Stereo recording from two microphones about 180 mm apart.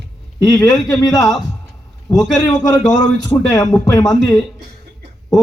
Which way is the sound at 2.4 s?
20° left (ahead or behind).